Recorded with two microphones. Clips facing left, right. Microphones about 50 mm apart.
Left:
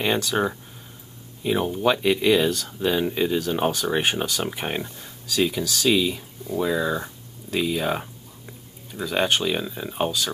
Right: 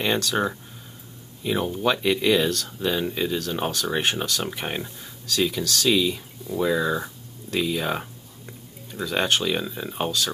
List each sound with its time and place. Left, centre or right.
0.0 s speech: centre